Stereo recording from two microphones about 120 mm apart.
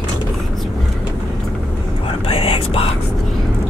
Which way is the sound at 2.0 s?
50° left (ahead or behind).